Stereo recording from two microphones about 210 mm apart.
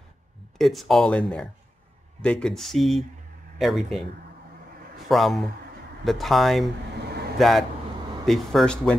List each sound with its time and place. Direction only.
0.6 s speech: centre (ahead or behind)
5.0 s speech: centre (ahead or behind)